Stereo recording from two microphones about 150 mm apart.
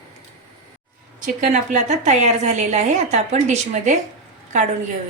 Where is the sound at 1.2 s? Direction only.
55° right (ahead or behind).